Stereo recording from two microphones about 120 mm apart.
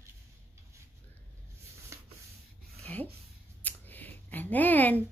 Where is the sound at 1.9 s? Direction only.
25° right (ahead or behind).